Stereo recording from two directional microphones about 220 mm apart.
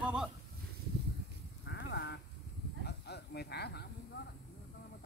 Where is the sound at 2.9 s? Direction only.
50° left (ahead or behind).